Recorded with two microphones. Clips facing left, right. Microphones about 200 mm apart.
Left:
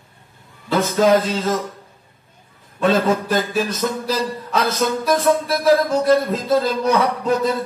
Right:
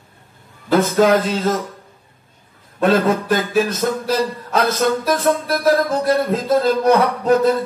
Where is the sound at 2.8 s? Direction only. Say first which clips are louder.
Right 1 dB; 50° right (ahead or behind).